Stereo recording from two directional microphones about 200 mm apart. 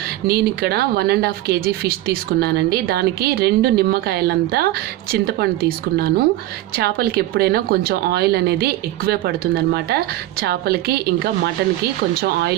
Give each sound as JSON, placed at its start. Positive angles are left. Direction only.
{"t": 0.3, "sound": "speech", "side_deg": -50}